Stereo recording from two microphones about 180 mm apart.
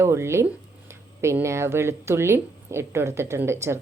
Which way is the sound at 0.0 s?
15° right (ahead or behind).